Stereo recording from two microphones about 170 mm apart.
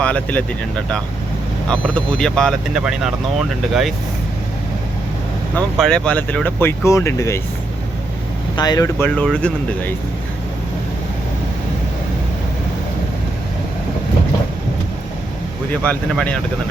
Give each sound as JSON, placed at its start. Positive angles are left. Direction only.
{"t": 0.0, "sound": "speech", "side_deg": 10}
{"t": 1.6, "sound": "speech", "side_deg": 5}
{"t": 5.7, "sound": "speech", "side_deg": 5}
{"t": 8.5, "sound": "speech", "side_deg": 25}
{"t": 9.0, "sound": "speech", "side_deg": 5}
{"t": 15.7, "sound": "speech", "side_deg": 5}